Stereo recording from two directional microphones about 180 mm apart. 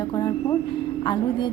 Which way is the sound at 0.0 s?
20° left (ahead or behind).